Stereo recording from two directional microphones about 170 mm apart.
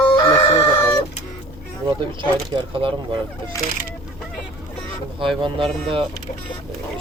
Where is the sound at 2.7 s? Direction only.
30° right (ahead or behind).